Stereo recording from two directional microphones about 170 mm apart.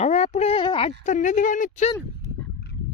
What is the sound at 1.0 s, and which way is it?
Speech, 45° left (ahead or behind).